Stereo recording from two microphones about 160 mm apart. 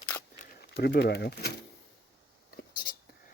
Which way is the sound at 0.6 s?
85° left.